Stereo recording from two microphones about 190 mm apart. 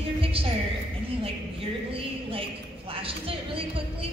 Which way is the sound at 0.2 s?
30° right (ahead or behind).